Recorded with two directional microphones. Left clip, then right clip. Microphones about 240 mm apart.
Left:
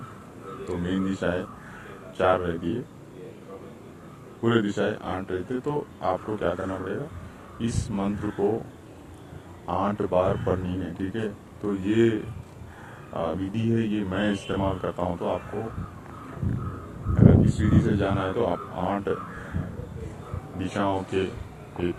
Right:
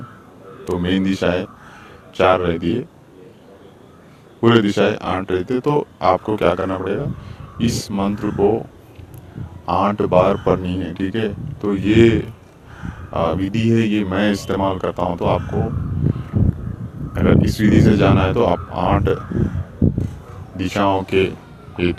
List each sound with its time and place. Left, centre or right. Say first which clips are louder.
0.7 s speech: right 10 dB; right
4.4 s speech: right 10 dB; right
9.6 s speech: right 9 dB; right
17.2 s speech: right 5 dB; right
20.6 s speech: right 9 dB; right